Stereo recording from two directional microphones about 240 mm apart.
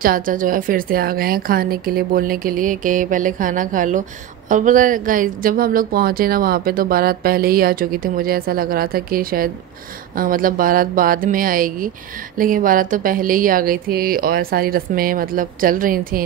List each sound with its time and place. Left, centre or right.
0.0 s a woman's voice: right